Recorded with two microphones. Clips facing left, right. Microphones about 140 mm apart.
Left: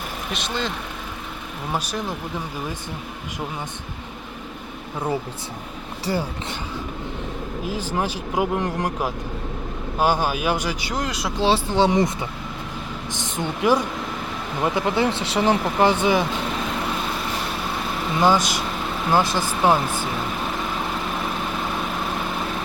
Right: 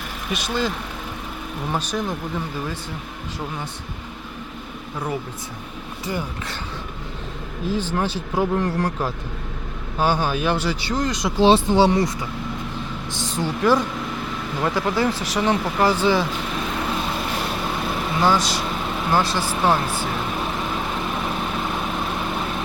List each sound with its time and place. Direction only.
0.3 s speech: 5° right (ahead or behind)
1.7 s speech: 5° left (ahead or behind)
6.1 s speech: 35° left (ahead or behind)
7.9 s speech: 10° left (ahead or behind)
11.3 s speech: 15° right (ahead or behind)
11.9 s speech: 20° left (ahead or behind)
13.1 s speech: 20° left (ahead or behind)
18.2 s speech: 15° left (ahead or behind)